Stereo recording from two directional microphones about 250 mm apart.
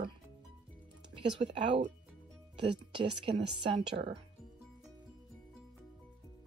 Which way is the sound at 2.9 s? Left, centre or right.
Right.